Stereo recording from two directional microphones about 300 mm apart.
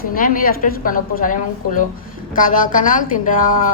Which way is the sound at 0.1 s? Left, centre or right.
Left.